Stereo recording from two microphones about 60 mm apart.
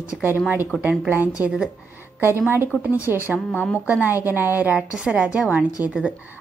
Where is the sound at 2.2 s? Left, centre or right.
Right.